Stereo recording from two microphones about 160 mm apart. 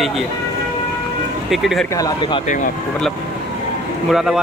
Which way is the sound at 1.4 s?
Centre (ahead or behind).